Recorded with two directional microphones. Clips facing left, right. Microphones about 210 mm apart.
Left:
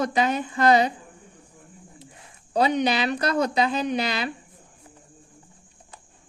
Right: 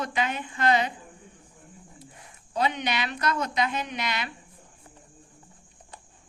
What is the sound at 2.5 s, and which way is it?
Speech, 35° left (ahead or behind).